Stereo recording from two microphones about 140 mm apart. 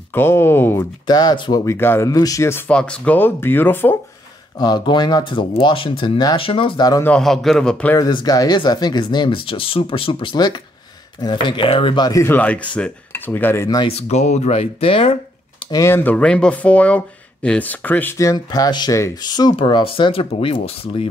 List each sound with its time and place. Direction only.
0.1 s speech: 15° left (ahead or behind)
1.0 s speech: 30° left (ahead or behind)
2.7 s speech: 5° left (ahead or behind)
4.6 s speech: 30° left (ahead or behind)
7.0 s speech: 5° left (ahead or behind)
8.0 s speech: 30° left (ahead or behind)
13.8 s speech: 50° left (ahead or behind)
15.7 s speech: 20° left (ahead or behind); by 21.1 s 45° left (ahead or behind)